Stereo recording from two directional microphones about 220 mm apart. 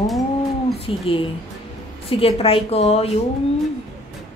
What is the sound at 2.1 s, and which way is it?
A woman's voice, 25° left (ahead or behind).